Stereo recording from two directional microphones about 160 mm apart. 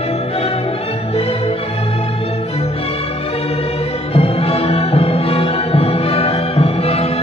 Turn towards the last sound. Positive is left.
turn(degrees=40)  # may be behind; listen again after turning